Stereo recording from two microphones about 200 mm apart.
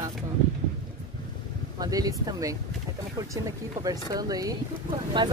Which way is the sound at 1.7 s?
20° right (ahead or behind).